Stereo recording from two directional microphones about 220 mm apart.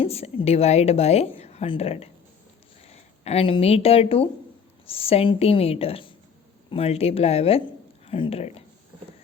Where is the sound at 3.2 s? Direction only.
25° left (ahead or behind).